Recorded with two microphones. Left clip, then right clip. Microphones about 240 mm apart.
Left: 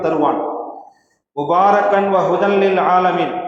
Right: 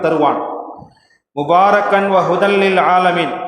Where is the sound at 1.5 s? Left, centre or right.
Right.